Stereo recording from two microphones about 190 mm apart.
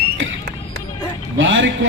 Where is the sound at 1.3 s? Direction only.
85° right.